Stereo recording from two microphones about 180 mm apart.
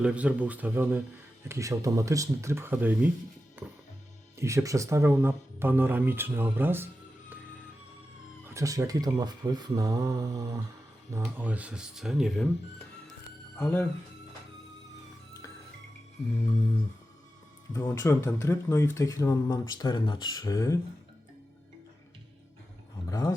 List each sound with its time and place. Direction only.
0.0 s speech: 5° right (ahead or behind)
3.6 s music: 10° right (ahead or behind)
4.4 s speech: 15° right (ahead or behind)
8.4 s speech: 15° right (ahead or behind)
11.1 s speech: 10° right (ahead or behind)
13.6 s speech: 10° left (ahead or behind)
17.7 s speech: 15° left (ahead or behind)
23.0 s speech: 15° left (ahead or behind)